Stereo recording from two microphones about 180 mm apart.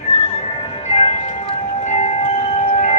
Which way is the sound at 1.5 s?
35° left (ahead or behind).